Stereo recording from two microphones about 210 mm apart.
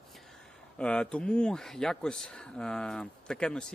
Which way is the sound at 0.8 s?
5° left (ahead or behind).